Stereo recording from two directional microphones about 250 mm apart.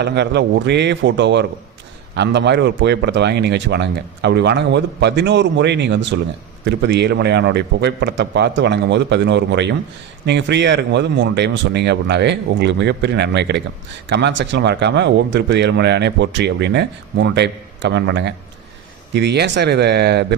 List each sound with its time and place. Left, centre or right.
0.0 s speech: right